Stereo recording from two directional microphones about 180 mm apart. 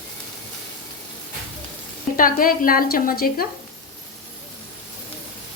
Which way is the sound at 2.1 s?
50° left (ahead or behind).